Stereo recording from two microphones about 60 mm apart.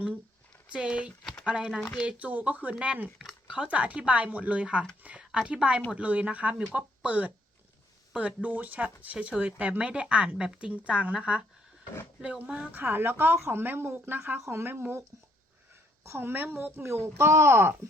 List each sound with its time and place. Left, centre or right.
0.7 s a woman's voice: centre
5.0 s a sound: right
5.5 s a woman's voice: centre
12.7 s a woman's voice: right
16.0 s a woman's voice: right
16.9 s speech: right